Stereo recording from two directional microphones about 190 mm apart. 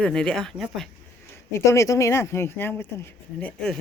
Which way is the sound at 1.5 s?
15° left (ahead or behind).